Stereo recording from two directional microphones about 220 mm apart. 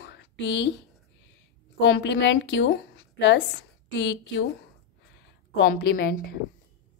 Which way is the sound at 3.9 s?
55° left (ahead or behind).